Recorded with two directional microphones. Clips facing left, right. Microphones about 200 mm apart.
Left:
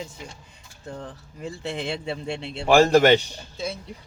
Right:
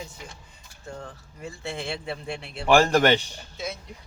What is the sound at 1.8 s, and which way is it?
Speech, 25° left (ahead or behind).